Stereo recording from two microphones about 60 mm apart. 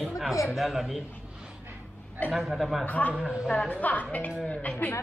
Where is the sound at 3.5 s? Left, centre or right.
Left.